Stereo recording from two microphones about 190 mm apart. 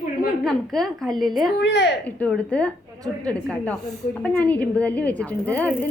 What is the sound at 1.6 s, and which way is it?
Speech, 65° left (ahead or behind).